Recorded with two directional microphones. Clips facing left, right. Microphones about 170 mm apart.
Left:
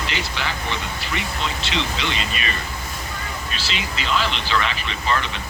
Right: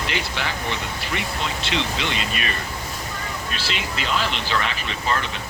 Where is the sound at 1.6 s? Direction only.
55° right (ahead or behind).